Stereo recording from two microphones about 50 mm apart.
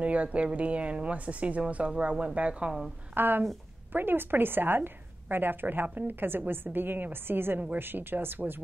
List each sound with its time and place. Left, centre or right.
0.0 s speech: right
3.2 s a woman's voice: right